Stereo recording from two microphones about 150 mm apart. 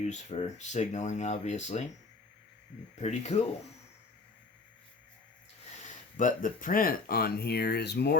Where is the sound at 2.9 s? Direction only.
50° left (ahead or behind).